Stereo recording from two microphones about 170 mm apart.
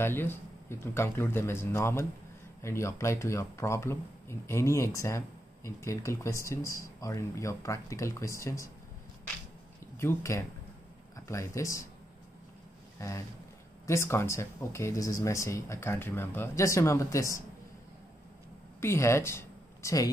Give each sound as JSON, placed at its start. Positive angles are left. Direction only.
{"t": 0.0, "sound": "speech", "side_deg": 15}
{"t": 9.9, "sound": "speech", "side_deg": 15}
{"t": 13.0, "sound": "speech", "side_deg": 15}
{"t": 18.8, "sound": "speech", "side_deg": 15}